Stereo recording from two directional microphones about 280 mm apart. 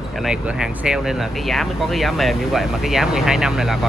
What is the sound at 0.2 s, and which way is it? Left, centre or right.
Speech, centre.